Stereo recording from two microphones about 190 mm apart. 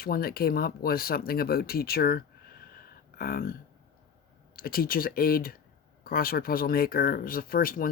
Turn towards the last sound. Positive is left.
turn(degrees=50)  # may be behind; listen again after turning